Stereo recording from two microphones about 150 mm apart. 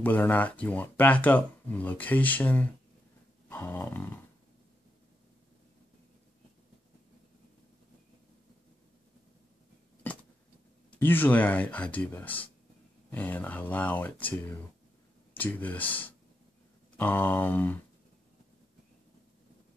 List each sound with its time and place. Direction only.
0.0 s speech: 10° left (ahead or behind)
3.4 s dog: 15° left (ahead or behind)
11.0 s speech: 15° left (ahead or behind)